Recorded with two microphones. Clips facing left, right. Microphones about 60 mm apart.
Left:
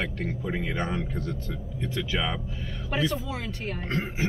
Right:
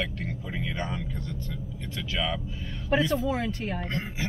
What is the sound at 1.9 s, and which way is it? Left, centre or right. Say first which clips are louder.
Speech: left 1 dB; left.